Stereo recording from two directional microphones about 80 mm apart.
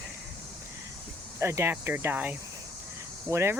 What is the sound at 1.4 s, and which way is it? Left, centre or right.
Cricket, right.